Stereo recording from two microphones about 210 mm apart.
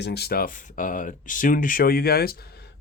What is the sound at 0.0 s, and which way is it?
Speech, 50° left (ahead or behind).